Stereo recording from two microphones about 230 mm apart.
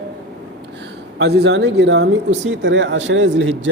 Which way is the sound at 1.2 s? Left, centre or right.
Right.